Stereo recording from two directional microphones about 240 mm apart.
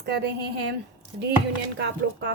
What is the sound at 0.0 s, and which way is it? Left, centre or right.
Speech, right.